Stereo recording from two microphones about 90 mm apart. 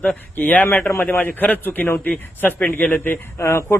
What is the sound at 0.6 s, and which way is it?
A man's voice, 30° left (ahead or behind).